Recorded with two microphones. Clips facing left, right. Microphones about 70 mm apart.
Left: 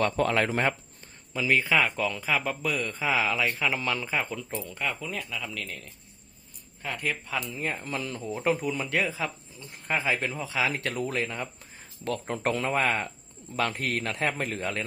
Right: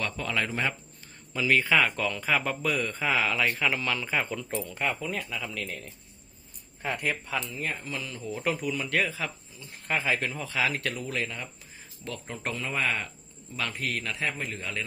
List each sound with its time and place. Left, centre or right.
0.0 s speech: left
1.3 s speech: centre
3.8 s speech: left
4.1 s speech: centre
7.0 s speech: centre
7.5 s speech: left
8.4 s speech: left
11.1 s speech: left
12.0 s a man's voice: left
12.7 s speech: left
13.6 s a man's voice: left